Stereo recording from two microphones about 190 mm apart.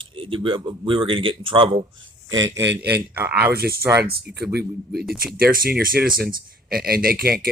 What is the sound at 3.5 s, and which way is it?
Speech, 55° right (ahead or behind).